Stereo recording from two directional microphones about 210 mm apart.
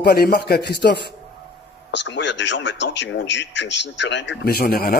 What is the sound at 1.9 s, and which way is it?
Speech, 60° left (ahead or behind).